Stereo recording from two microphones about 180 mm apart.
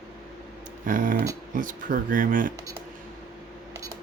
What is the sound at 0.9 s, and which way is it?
Speech, 50° right (ahead or behind).